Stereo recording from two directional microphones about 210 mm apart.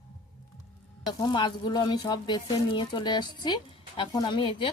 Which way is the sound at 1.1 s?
20° left (ahead or behind).